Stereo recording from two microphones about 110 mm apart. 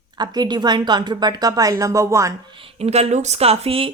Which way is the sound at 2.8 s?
80° right.